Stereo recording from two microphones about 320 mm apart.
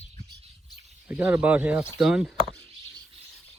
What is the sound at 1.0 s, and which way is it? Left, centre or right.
Speech, centre.